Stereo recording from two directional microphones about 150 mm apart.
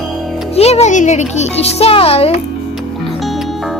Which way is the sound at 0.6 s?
45° left (ahead or behind).